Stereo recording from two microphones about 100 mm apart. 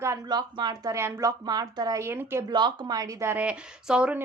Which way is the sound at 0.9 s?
30° right (ahead or behind).